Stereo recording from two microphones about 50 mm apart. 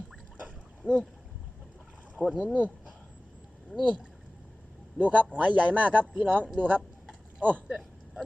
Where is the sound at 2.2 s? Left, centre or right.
Centre.